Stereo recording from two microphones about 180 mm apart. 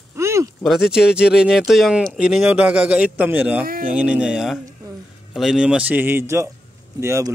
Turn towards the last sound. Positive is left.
turn(degrees=-15)  # may be behind; listen again after turning